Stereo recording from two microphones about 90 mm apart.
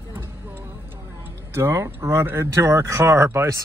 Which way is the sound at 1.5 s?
30° right (ahead or behind).